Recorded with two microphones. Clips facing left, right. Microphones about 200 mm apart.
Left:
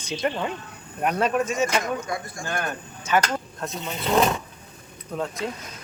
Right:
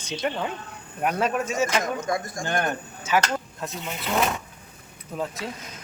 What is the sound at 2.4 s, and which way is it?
Speech, 20° right (ahead or behind).